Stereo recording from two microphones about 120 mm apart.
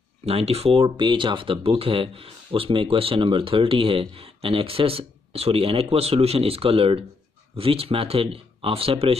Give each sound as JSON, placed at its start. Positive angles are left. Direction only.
{"t": 0.2, "sound": "speech", "side_deg": -60}